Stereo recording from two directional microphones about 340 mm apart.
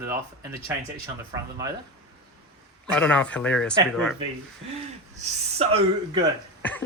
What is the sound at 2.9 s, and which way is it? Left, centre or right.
Speech, centre.